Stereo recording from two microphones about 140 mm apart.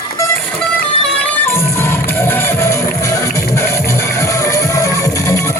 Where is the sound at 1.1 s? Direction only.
15° left (ahead or behind).